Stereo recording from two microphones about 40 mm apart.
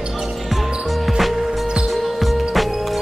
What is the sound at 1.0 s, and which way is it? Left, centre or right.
Music, centre.